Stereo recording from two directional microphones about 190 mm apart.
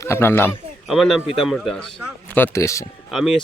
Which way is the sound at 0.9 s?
Centre (ahead or behind).